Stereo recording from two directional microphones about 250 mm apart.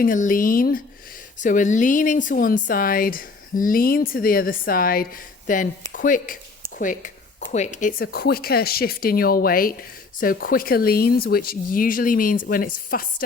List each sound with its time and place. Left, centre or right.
0.0 s speech: left